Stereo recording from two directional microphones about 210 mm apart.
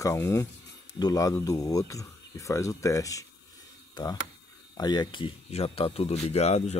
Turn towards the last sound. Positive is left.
turn(degrees=30)  # may be behind; listen again after turning